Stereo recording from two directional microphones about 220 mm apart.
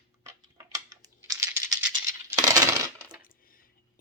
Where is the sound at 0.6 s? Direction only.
15° right (ahead or behind).